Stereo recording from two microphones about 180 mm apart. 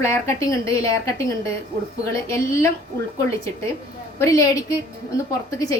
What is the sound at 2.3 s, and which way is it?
A woman's voice, 15° left (ahead or behind).